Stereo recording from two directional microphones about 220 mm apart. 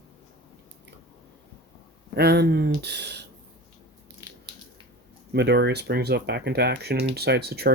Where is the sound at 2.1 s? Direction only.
45° right (ahead or behind).